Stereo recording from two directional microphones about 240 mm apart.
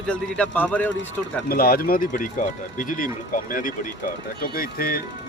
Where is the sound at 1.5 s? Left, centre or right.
Left.